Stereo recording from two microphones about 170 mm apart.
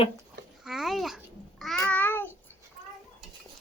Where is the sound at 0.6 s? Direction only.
Centre (ahead or behind).